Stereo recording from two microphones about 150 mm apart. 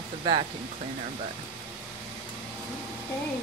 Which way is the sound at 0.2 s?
30° right (ahead or behind).